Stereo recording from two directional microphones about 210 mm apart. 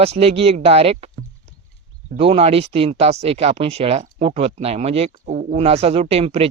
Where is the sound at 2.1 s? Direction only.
30° right (ahead or behind).